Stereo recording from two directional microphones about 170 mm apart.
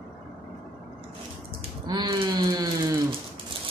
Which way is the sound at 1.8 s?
25° right (ahead or behind).